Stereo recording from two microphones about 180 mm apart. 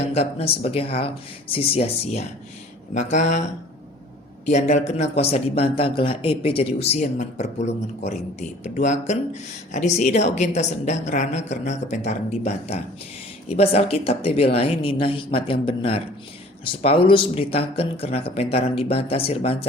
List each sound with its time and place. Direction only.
0.1 s speech: 35° left (ahead or behind)